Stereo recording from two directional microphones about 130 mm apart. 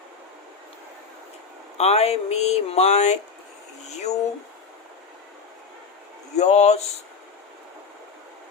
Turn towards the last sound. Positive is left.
turn(degrees=60)  # may be behind; listen again after turning